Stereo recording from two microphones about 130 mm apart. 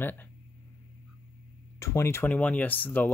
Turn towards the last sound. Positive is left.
turn(degrees=15)  # may be behind; listen again after turning